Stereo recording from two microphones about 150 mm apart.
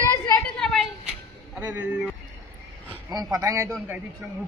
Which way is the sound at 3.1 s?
25° right (ahead or behind).